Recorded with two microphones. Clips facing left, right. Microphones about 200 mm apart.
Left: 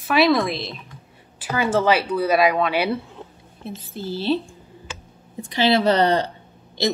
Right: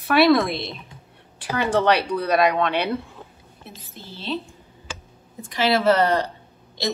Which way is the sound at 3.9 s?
35° left (ahead or behind).